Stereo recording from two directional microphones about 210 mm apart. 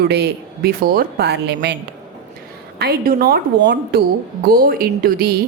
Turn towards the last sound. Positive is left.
turn(degrees=-45)  # may be behind; listen again after turning